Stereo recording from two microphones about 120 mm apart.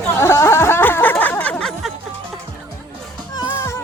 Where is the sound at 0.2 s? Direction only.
20° left (ahead or behind); by 1.9 s 5° left (ahead or behind).